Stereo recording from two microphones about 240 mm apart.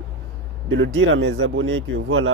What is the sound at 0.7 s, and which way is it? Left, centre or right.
Speech, right.